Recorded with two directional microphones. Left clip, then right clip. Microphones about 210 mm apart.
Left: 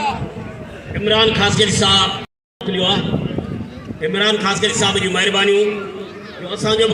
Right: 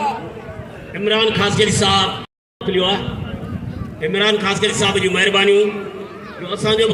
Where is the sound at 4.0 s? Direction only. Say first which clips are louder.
Even; 35° right (ahead or behind).